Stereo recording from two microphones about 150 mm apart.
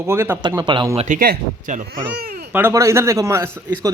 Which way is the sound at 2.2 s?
90° right.